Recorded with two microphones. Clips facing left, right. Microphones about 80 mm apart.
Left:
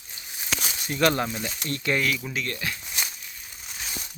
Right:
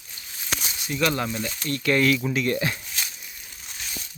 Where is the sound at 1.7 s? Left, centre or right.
Left.